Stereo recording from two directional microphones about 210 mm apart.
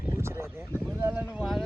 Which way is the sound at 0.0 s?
10° right (ahead or behind).